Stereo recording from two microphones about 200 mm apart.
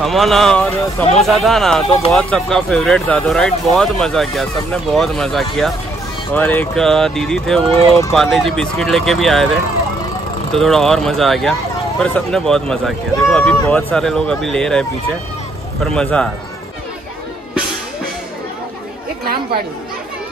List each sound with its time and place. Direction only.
0.0 s speech: centre (ahead or behind)
10.5 s speech: centre (ahead or behind)
19.2 s speech: 50° right (ahead or behind)